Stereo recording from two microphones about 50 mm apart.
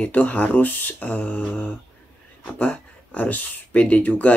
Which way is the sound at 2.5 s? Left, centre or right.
Left.